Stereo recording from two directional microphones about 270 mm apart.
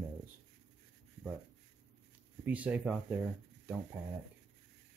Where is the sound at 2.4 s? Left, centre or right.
Centre.